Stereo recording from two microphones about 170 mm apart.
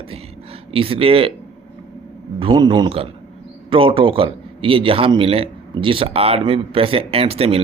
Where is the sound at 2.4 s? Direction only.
30° right (ahead or behind).